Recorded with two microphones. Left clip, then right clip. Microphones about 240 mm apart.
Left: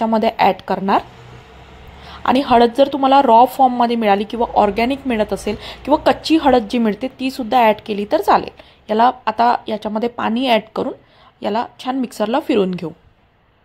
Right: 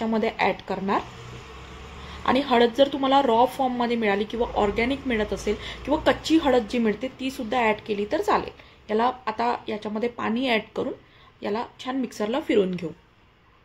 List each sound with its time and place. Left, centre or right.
0.0 s a woman's voice: left
2.2 s a woman's voice: left